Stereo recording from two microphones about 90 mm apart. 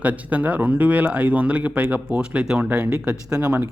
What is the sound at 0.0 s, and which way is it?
A man's voice, 15° right (ahead or behind).